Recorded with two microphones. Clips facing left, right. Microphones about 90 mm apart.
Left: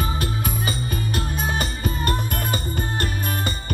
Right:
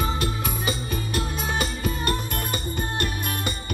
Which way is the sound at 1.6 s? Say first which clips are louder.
Left 1 dB; 45° left (ahead or behind).